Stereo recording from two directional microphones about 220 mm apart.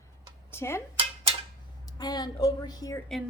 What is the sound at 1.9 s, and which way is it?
A woman's voice, 20° left (ahead or behind).